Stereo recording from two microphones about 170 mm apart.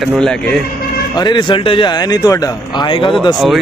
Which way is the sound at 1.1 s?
25° left (ahead or behind).